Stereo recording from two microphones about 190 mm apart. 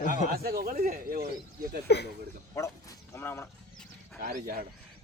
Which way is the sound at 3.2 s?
10° left (ahead or behind).